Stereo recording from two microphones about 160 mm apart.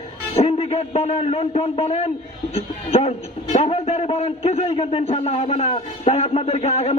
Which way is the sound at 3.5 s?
40° left (ahead or behind).